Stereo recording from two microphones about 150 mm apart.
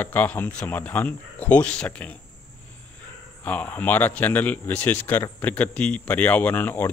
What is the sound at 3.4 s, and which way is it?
Speech, 10° left (ahead or behind).